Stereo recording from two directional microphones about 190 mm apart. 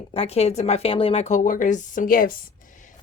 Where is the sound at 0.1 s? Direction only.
30° left (ahead or behind).